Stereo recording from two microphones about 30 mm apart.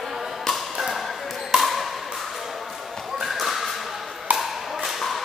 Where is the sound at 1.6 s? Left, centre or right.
Centre.